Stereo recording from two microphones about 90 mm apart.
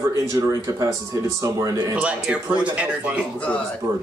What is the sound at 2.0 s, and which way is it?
Speech, 15° right (ahead or behind).